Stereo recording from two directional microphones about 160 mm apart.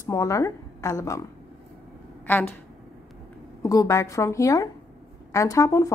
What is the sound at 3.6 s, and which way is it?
A woman's voice, 20° left (ahead or behind).